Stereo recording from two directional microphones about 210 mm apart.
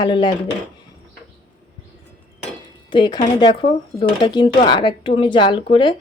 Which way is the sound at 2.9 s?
20° left (ahead or behind).